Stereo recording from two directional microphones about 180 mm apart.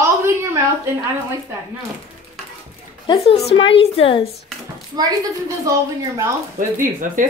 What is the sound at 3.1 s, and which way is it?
A woman's voice, 30° left (ahead or behind).